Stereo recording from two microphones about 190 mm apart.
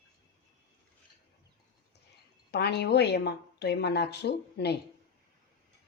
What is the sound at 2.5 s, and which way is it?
A woman's voice, 60° left (ahead or behind).